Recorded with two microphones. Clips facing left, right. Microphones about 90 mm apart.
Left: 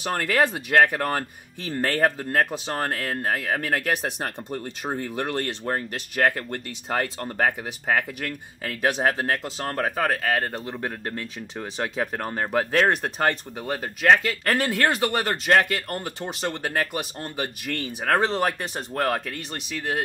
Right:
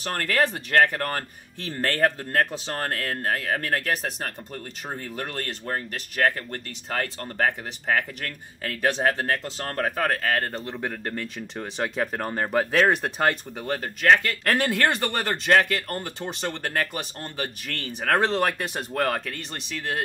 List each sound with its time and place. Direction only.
0.0 s speech: 10° left (ahead or behind)
14.0 s speech: 15° left (ahead or behind)
14.4 s speech: centre (ahead or behind)